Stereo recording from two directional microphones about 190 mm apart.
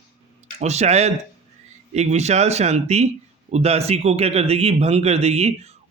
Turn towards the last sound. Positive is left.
turn(degrees=-35)  # may be behind; listen again after turning